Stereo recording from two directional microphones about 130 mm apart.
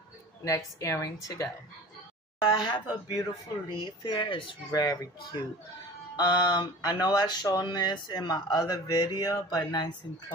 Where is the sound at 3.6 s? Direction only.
35° left (ahead or behind).